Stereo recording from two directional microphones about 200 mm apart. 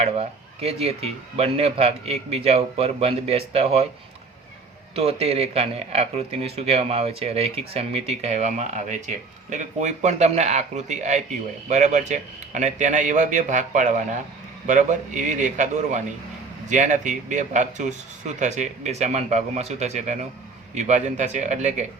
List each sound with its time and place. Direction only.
0.0 s speech: 30° right (ahead or behind)
4.9 s speech: 30° right (ahead or behind)